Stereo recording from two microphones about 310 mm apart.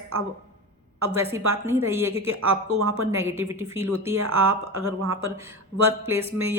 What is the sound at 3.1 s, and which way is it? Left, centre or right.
Speech, centre.